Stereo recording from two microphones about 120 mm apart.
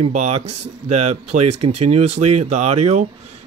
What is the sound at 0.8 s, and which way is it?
Speech, 65° right (ahead or behind).